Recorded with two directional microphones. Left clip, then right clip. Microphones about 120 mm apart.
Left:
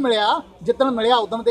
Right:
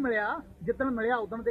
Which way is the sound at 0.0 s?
20° left (ahead or behind).